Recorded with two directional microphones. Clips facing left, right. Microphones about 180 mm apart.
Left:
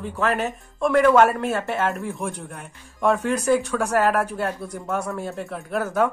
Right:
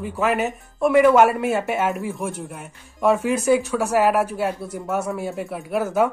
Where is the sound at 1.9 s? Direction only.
Centre (ahead or behind).